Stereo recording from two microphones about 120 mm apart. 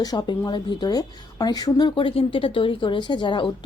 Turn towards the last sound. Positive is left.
turn(degrees=40)  # may be behind; listen again after turning